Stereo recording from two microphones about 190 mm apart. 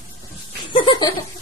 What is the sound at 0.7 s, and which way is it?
Laughter, 25° left (ahead or behind).